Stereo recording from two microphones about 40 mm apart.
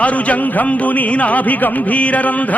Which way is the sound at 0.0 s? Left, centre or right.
Left.